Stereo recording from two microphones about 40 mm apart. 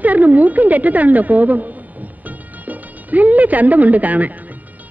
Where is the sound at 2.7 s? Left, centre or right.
Right.